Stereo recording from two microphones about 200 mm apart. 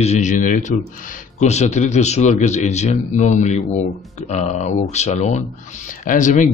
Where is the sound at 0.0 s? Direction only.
35° left (ahead or behind).